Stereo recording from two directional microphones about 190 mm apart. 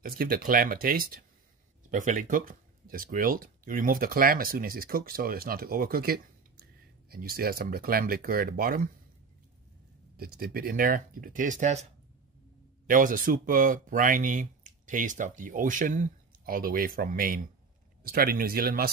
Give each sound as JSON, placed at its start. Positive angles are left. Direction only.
{"t": 0.0, "sound": "speech", "side_deg": -50}
{"t": 10.1, "sound": "speech", "side_deg": -50}